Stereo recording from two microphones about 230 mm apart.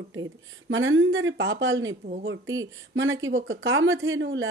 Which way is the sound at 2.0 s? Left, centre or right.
Right.